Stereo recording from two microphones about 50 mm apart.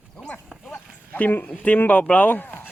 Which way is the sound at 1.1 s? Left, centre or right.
Left.